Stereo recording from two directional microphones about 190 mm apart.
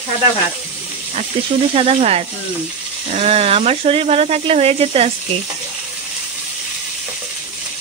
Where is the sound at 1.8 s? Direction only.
30° right (ahead or behind).